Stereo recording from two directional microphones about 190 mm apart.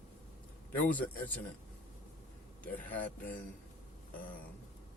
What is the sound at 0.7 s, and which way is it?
Speech, 10° left (ahead or behind).